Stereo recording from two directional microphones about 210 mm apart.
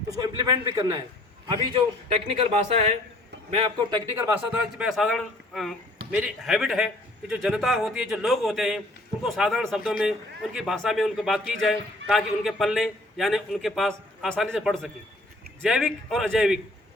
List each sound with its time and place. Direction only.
0.1 s a man's voice: 15° right (ahead or behind)
1.7 s speech: 30° right (ahead or behind)
4.4 s a man's voice: 5° right (ahead or behind)